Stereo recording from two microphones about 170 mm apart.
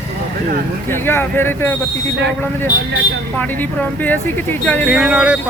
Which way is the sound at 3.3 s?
10° left (ahead or behind).